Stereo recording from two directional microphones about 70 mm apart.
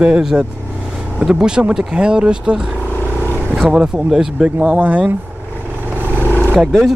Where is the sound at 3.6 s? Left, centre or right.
Centre.